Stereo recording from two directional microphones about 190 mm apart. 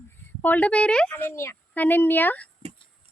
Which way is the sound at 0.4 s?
10° left (ahead or behind).